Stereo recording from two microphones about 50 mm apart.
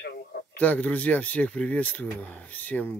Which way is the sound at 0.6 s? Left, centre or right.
Left.